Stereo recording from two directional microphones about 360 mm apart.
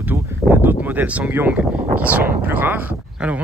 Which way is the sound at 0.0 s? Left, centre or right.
Centre.